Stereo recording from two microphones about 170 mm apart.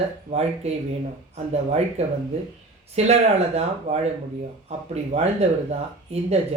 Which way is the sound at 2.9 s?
40° right (ahead or behind).